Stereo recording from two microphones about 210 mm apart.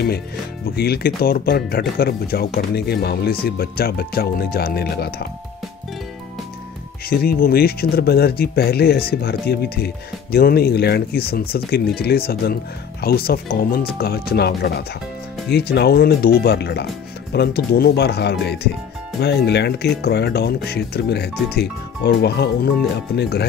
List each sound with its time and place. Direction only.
0.7 s speech: 50° left (ahead or behind)
7.1 s speech: 45° left (ahead or behind)